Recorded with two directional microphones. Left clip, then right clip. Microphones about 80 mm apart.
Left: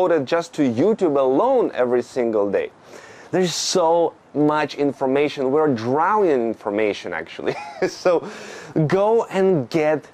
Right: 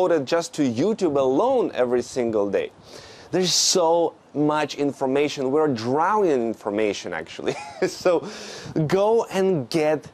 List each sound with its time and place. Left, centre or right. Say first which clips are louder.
0.0 s speech: left 2 dB; right